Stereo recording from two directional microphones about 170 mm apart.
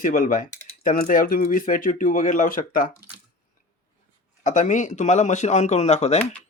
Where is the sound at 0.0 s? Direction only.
50° left (ahead or behind).